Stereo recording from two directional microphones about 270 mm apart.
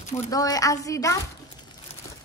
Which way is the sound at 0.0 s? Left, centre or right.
Left.